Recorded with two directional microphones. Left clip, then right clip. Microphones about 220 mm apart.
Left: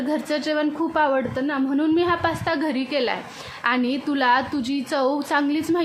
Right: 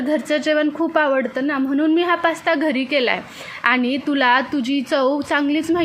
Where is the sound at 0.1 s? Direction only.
10° right (ahead or behind).